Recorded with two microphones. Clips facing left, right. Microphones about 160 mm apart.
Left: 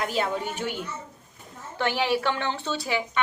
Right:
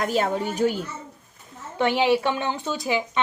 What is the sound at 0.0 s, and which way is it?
Speech, 45° right (ahead or behind).